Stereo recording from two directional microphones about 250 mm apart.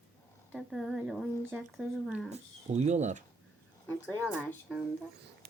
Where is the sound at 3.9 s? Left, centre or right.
Centre.